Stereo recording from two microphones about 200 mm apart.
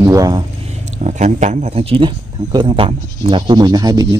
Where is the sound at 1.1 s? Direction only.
35° right (ahead or behind); by 4.0 s 20° right (ahead or behind).